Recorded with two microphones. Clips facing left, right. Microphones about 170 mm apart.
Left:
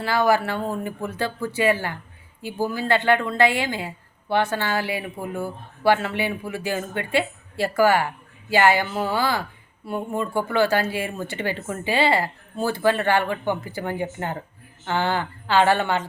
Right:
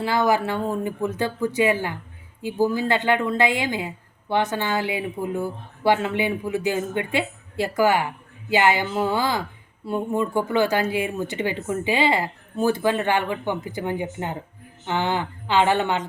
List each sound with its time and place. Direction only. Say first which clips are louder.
0.0 s speech: even; 20° right (ahead or behind)